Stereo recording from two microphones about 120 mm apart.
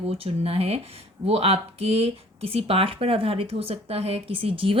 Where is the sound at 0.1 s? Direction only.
55° right (ahead or behind).